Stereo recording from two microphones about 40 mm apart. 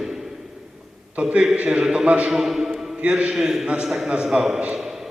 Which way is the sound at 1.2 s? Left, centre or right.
Right.